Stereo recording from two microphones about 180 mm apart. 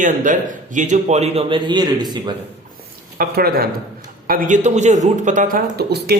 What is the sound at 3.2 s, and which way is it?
A man's voice, 55° right (ahead or behind).